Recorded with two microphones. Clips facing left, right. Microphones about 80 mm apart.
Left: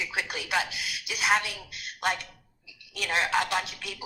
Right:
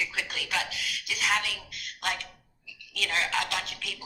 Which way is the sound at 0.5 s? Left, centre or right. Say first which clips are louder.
Left 3 dB; left.